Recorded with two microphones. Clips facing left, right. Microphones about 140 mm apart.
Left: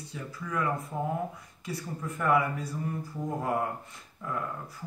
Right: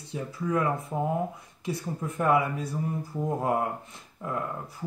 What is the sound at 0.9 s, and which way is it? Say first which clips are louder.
Speech: right 4 dB; 35° right (ahead or behind).